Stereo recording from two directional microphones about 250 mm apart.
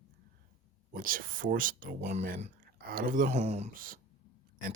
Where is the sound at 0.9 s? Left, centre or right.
Right.